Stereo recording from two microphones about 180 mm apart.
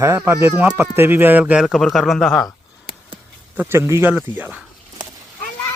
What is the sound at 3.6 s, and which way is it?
Speech, 15° right (ahead or behind).